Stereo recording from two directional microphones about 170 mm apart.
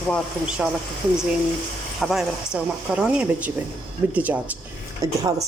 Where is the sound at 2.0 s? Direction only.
Centre (ahead or behind).